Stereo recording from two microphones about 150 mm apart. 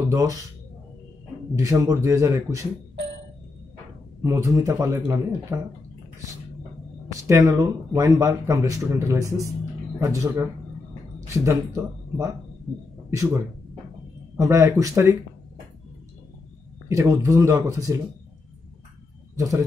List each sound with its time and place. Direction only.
0.1 s speech: 20° right (ahead or behind)
1.5 s speech: 25° right (ahead or behind)
4.2 s speech: 20° right (ahead or behind)
7.1 s speech: 20° right (ahead or behind)
16.9 s speech: 20° right (ahead or behind)
19.3 s speech: 20° right (ahead or behind)